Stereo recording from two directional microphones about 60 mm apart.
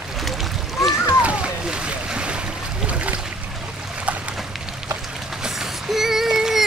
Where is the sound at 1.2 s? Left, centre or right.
Right.